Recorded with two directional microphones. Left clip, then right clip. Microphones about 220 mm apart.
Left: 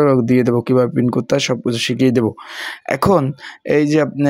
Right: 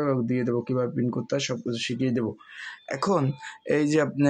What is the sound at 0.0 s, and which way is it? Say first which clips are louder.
Speech: left 13 dB; 45° left (ahead or behind).